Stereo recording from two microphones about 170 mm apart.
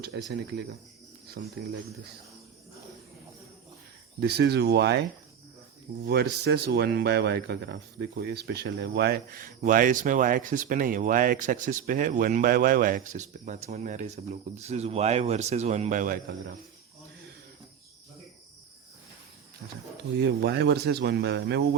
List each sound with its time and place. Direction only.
0.0 s speech: 75° right (ahead or behind)
4.2 s speech: 75° right (ahead or behind)
6.1 s speech: 75° right (ahead or behind); by 16.1 s 50° right (ahead or behind)
20.2 s speech: 70° right (ahead or behind)